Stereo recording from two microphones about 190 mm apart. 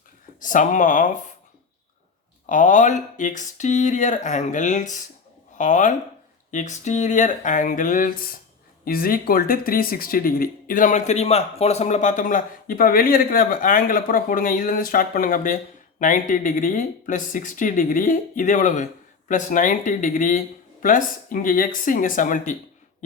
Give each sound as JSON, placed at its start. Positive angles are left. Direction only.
{"t": 0.4, "sound": "speech", "side_deg": 45}
{"t": 2.5, "sound": "speech", "side_deg": 40}